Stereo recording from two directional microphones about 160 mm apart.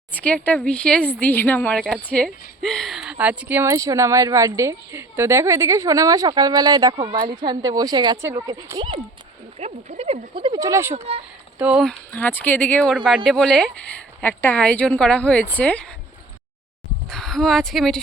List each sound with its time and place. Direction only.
0.1 s speech: 10° left (ahead or behind); by 9.0 s 25° right (ahead or behind)
9.6 s speech: 40° right (ahead or behind)
10.6 s speech: 15° right (ahead or behind)
10.9 s speech: 40° right (ahead or behind)
11.6 s speech: 5° right (ahead or behind)
11.9 s speech: 10° left (ahead or behind)
17.1 s a woman's voice: centre (ahead or behind)